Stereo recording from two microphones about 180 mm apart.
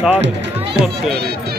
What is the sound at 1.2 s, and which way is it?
Speech, 60° right (ahead or behind).